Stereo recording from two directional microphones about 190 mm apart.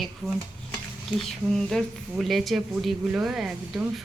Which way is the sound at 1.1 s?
Centre (ahead or behind).